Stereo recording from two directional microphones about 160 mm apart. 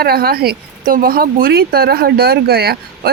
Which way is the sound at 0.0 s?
75° right (ahead or behind).